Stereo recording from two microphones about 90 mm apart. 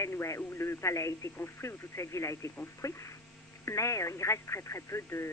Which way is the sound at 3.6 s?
35° left (ahead or behind).